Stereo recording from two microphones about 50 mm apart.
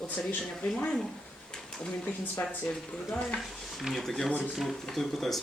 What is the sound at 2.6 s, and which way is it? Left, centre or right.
Speech, centre.